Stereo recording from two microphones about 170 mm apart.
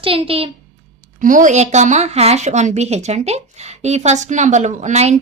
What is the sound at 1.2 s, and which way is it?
A woman's voice, 50° right (ahead or behind).